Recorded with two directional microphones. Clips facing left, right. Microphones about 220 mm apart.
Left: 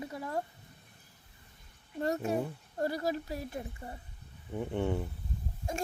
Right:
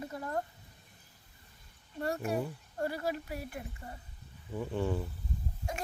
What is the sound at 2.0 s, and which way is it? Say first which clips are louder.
Speech: left 2 dB; 25° left (ahead or behind).